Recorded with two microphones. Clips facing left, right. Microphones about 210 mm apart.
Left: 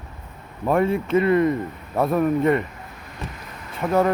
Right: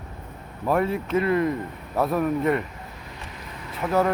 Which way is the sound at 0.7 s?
Centre (ahead or behind).